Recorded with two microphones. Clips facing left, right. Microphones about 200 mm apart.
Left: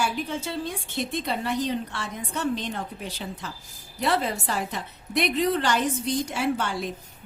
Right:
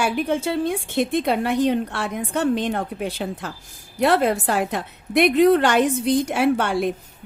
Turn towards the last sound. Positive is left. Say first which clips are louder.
# right 7 dB
turn(degrees=-60)  # may be behind; listen again after turning